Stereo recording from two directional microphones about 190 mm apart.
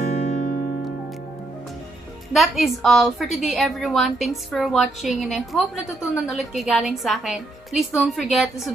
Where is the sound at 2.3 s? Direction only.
Centre (ahead or behind).